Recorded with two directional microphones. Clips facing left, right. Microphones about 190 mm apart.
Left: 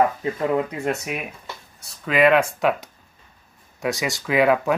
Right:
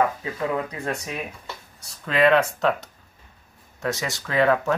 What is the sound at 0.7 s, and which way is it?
Speech, 15° left (ahead or behind).